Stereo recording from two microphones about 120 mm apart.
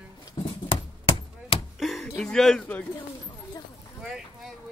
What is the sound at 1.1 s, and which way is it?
Chop, 50° left (ahead or behind).